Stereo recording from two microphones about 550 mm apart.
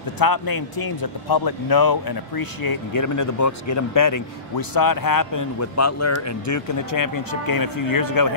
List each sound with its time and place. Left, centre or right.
0.2 s speech: left